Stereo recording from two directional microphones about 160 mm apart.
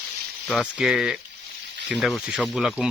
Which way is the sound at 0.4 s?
5° right (ahead or behind).